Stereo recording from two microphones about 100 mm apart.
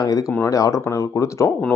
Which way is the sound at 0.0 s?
40° left (ahead or behind).